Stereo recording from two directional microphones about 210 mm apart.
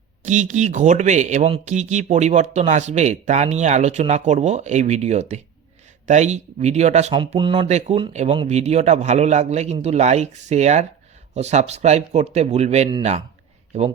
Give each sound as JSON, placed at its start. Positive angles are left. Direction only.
{"t": 0.3, "sound": "speech", "side_deg": -35}